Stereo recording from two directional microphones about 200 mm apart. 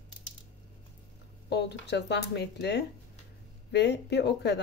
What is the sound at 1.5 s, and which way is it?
Speech, 55° left (ahead or behind).